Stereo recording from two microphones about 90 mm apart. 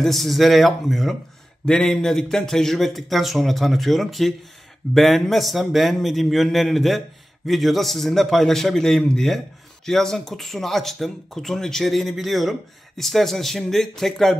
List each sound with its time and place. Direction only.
0.0 s speech: centre (ahead or behind)